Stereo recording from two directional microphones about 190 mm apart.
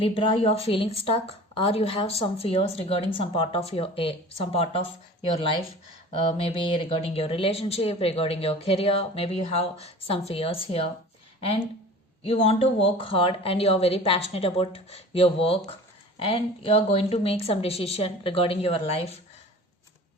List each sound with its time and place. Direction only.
0.0 s speech: 30° left (ahead or behind)
12.2 s speech: 30° left (ahead or behind)